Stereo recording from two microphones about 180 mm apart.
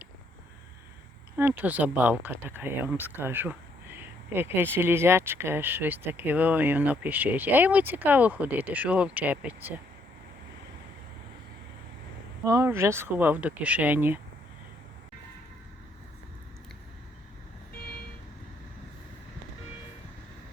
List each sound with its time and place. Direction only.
1.4 s speech: 10° right (ahead or behind)
12.5 s speech: 15° right (ahead or behind)